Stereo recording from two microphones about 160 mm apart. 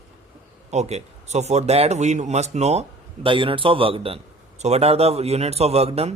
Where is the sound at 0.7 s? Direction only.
45° right (ahead or behind).